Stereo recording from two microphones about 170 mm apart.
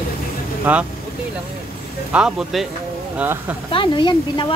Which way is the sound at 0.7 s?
10° right (ahead or behind).